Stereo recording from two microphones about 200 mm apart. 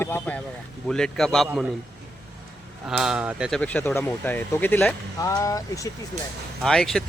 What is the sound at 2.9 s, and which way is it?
Speech, 5° right (ahead or behind).